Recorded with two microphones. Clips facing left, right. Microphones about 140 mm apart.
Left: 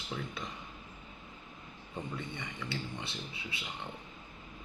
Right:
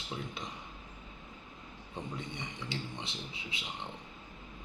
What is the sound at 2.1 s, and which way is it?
Speech, 20° right (ahead or behind).